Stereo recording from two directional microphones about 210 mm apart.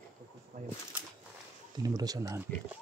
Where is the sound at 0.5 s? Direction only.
40° right (ahead or behind).